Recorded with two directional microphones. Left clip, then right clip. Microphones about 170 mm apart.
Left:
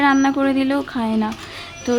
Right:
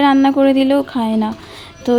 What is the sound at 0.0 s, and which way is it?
A woman's voice, 20° right (ahead or behind).